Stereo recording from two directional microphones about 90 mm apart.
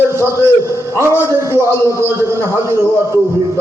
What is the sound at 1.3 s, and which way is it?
A man's voice, 35° right (ahead or behind).